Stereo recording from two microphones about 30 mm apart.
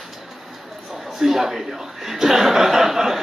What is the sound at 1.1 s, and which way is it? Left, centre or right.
A man's voice, centre.